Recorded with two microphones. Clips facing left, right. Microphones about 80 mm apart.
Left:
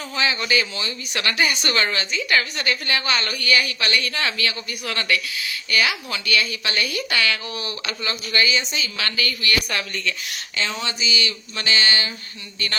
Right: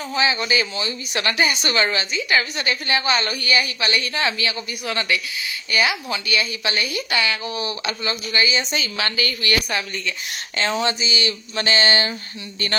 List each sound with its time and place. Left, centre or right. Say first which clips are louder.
0.1 s a woman's voice: right 1 dB; centre
10.6 s speech: right 5 dB; right